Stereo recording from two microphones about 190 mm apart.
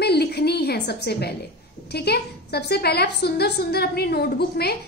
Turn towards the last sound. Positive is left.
turn(degrees=55)  # may be behind; listen again after turning